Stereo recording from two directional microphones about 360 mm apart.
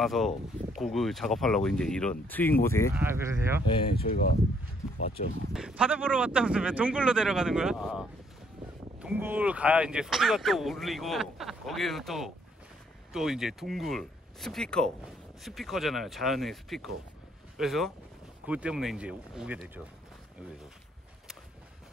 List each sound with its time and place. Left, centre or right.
0.0 s speech: centre
2.9 s speech: centre
3.9 s speech: left
5.5 s speech: centre